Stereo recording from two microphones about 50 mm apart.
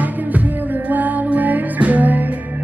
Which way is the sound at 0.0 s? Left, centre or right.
Right.